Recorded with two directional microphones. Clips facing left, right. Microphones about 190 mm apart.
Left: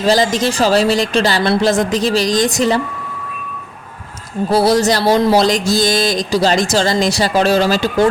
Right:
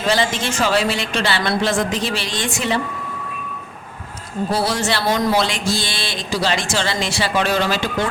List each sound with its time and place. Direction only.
0.0 s speech: 40° left (ahead or behind)
4.5 s speech: 40° left (ahead or behind)